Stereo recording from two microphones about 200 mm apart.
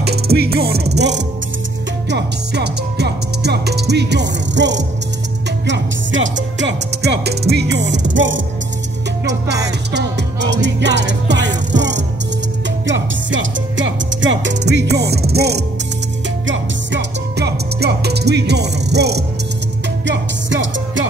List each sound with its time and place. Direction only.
0.0 s music: 50° right (ahead or behind)
2.0 s speech: 55° right (ahead or behind)
5.7 s music: 70° right (ahead or behind)
6.6 s music: 55° right (ahead or behind)
16.4 s music: 65° right (ahead or behind)